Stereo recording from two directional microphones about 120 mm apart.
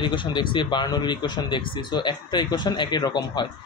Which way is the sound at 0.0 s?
40° left (ahead or behind).